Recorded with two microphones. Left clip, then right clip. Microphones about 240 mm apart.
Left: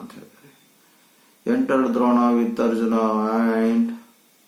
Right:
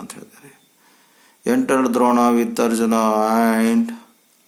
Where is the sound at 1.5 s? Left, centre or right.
Right.